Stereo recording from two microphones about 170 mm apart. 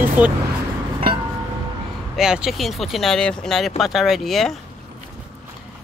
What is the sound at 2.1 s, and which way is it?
Speech, 5° right (ahead or behind).